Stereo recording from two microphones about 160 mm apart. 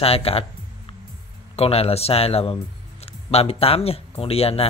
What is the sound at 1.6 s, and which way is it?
Speech, 40° left (ahead or behind).